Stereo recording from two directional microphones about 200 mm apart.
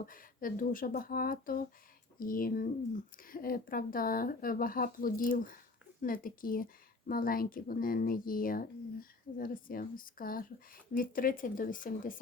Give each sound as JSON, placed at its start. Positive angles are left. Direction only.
{"t": 0.0, "sound": "speech", "side_deg": 45}